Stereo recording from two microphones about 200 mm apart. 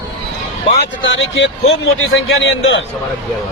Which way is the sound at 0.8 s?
65° left (ahead or behind).